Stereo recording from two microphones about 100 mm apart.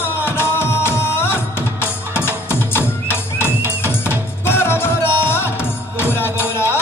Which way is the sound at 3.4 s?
25° left (ahead or behind).